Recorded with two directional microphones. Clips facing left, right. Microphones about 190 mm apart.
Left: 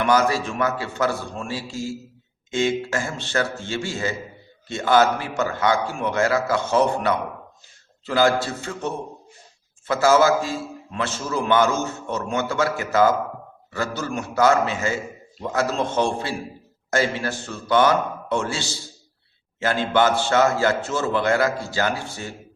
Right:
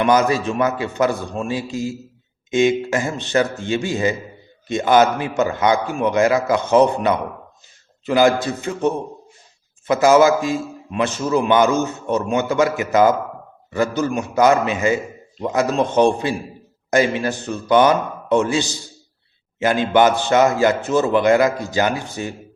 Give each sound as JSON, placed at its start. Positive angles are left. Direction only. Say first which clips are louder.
{"t": 0.0, "sound": "a man's voice", "louder": "right 3 dB", "side_deg": -20}